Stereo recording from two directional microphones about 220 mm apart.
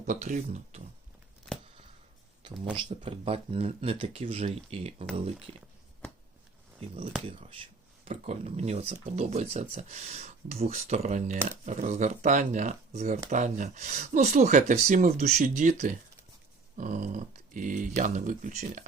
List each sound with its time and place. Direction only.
0.0 s speech: 35° right (ahead or behind)
2.7 s speech: 25° right (ahead or behind)
6.7 s speech: 25° right (ahead or behind)